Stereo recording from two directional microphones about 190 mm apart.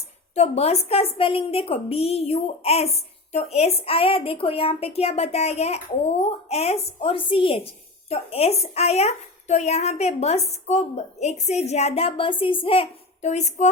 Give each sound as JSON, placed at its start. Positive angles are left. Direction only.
{"t": 0.3, "sound": "a woman's voice", "side_deg": 35}